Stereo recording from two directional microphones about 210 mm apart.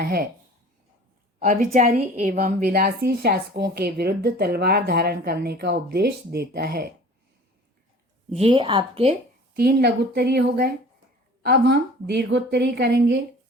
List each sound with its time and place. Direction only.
0.0 s speech: 45° right (ahead or behind)
1.4 s a woman's voice: 40° right (ahead or behind)
8.3 s a woman's voice: 30° right (ahead or behind)
9.6 s a woman's voice: 50° right (ahead or behind)